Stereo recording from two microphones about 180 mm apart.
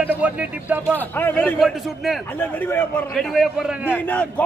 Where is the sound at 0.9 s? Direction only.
10° left (ahead or behind).